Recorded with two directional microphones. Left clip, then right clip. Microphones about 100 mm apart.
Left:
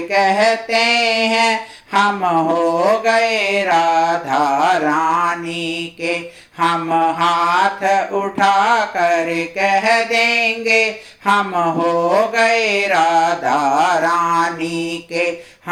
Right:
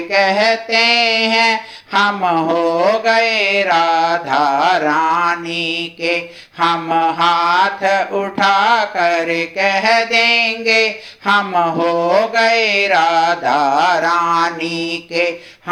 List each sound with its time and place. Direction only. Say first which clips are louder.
0.1 s mantra: right 1 dB; 25° right (ahead or behind)